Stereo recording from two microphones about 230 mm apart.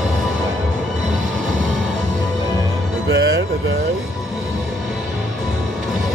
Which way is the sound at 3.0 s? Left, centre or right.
Right.